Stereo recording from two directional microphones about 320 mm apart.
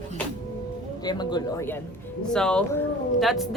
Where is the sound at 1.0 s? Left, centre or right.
Centre.